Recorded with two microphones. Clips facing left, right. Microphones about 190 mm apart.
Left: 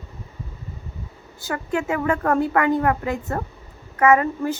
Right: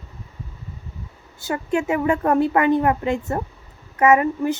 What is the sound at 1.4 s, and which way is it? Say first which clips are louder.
A child's voice: right 2 dB; 25° right (ahead or behind).